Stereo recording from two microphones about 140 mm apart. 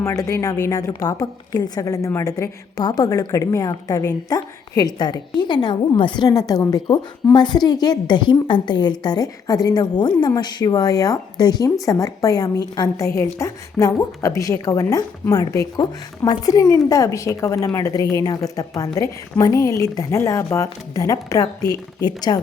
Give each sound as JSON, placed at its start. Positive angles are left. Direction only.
{"t": 0.0, "sound": "a woman's voice", "side_deg": 20}